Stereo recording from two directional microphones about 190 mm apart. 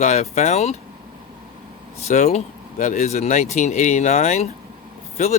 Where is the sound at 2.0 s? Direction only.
35° left (ahead or behind).